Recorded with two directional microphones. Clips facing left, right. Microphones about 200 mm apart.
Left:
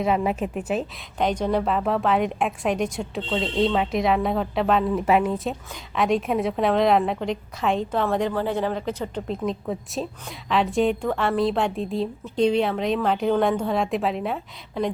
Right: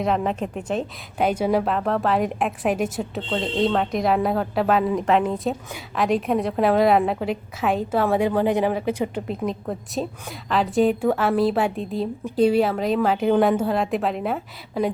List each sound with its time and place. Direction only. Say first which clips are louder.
0.0 s a woman's voice: even; 5° left (ahead or behind)
1.2 s a woman's voice: right 2 dB; 10° right (ahead or behind)